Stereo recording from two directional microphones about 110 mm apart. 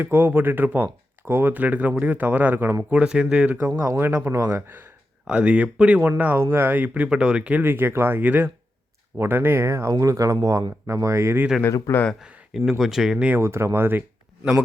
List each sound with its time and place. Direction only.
0.0 s speech: 20° right (ahead or behind)
3.8 s speech: 25° right (ahead or behind)
5.2 s speech: 10° right (ahead or behind)
11.6 s speech: 20° left (ahead or behind)
12.2 s speech: 5° right (ahead or behind)
13.4 s speech: 25° right (ahead or behind)